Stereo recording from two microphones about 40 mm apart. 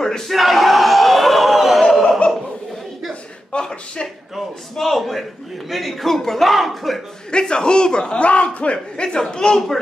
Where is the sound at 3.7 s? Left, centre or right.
Left.